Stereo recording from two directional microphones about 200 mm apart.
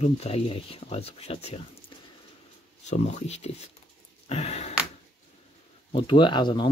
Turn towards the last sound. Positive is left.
turn(degrees=25)  # may be behind; listen again after turning